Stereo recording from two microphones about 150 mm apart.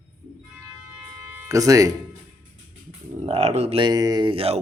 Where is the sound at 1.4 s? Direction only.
20° right (ahead or behind).